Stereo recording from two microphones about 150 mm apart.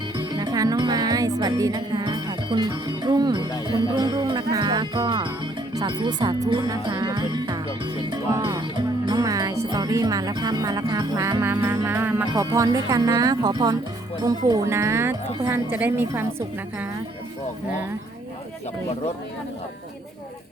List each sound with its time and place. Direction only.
0.2 s music: 30° right (ahead or behind)
15.7 s a woman's voice: 15° right (ahead or behind)